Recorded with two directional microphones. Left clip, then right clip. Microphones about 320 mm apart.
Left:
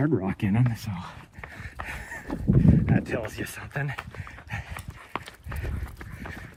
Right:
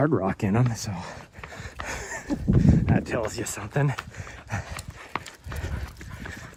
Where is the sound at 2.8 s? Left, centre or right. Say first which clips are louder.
Right 2 dB; centre.